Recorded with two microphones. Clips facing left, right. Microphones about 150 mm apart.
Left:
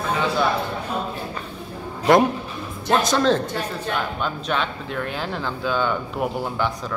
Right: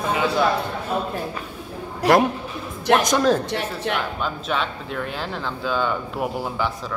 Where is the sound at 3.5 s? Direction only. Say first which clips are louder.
Right 2 dB; 75° right (ahead or behind).